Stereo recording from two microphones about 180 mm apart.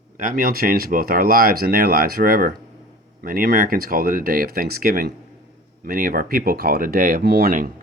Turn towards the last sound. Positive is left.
turn(degrees=-55)  # may be behind; listen again after turning